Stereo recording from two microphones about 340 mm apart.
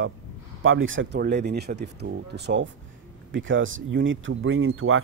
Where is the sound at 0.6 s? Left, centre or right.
Right.